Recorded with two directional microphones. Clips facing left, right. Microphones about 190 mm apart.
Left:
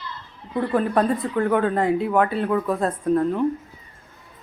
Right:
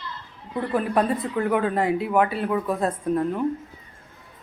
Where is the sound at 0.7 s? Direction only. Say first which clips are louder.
Left 2 dB; 10° right (ahead or behind).